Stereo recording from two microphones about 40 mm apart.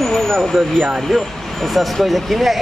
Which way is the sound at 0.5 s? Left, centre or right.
Centre.